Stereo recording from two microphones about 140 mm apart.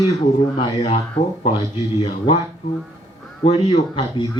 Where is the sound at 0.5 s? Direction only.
45° left (ahead or behind).